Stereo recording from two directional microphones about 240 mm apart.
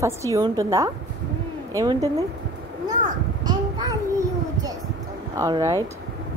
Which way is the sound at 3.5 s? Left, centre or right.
Centre.